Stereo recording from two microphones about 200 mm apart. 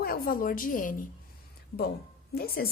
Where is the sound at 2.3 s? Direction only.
50° left (ahead or behind).